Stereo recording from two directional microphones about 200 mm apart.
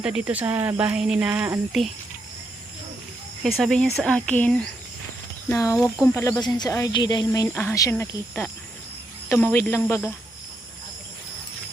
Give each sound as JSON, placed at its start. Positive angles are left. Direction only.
{"t": 0.0, "sound": "speech", "side_deg": -5}
{"t": 3.6, "sound": "speech", "side_deg": 0}